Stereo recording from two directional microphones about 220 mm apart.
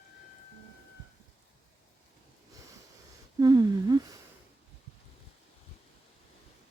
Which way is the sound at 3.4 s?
15° right (ahead or behind).